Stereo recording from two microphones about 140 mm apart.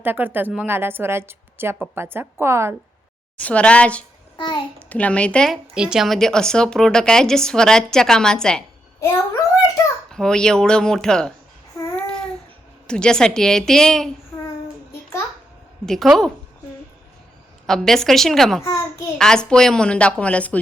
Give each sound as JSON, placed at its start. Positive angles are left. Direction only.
{"t": 0.0, "sound": "a woman's voice", "side_deg": -15}
{"t": 3.3, "sound": "a woman's voice", "side_deg": 10}
{"t": 4.4, "sound": "a child's voice", "side_deg": 30}
{"t": 4.9, "sound": "a woman's voice", "side_deg": 10}
{"t": 5.7, "sound": "a woman's voice", "side_deg": -5}
{"t": 10.1, "sound": "a woman's voice", "side_deg": 5}
{"t": 11.9, "sound": "babbling", "side_deg": 5}
{"t": 12.9, "sound": "a woman's voice", "side_deg": 5}
{"t": 15.9, "sound": "a woman's voice", "side_deg": 0}
{"t": 17.7, "sound": "a woman's voice", "side_deg": 5}
{"t": 18.6, "sound": "a child's voice", "side_deg": 20}
{"t": 19.2, "sound": "a woman's voice", "side_deg": 5}